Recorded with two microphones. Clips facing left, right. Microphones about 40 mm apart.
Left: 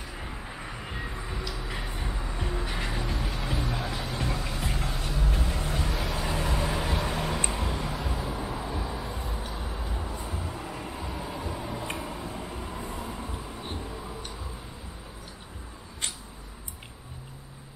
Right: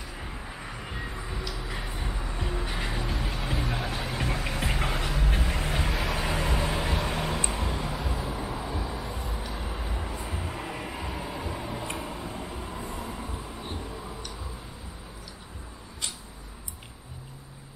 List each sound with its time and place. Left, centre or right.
0.1 s vehicle: centre
3.8 s music: centre
4.2 s music: right
4.6 s music: right
5.4 s vehicle: right
6.6 s vehicle: centre
9.7 s vehicle: centre
11.0 s music: centre
11.5 s tick-tock: centre
12.0 s vehicle: centre
13.7 s a sound: centre